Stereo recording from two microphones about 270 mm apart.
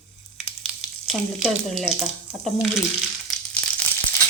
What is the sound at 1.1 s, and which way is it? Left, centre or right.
A woman's voice, centre.